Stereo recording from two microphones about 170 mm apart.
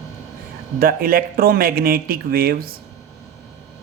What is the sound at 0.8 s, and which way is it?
Speech, 60° right (ahead or behind).